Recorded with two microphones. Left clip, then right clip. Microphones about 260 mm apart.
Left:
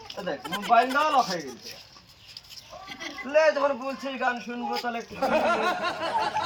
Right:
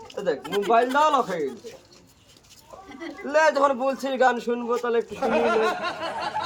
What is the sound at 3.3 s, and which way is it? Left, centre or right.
A man's voice, right.